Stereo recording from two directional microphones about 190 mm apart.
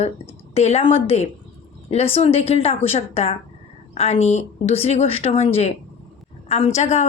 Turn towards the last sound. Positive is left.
turn(degrees=35)  # may be behind; listen again after turning